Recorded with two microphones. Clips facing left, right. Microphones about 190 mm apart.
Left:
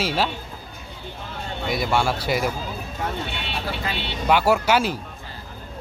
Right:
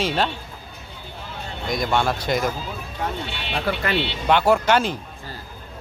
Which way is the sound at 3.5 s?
60° right (ahead or behind).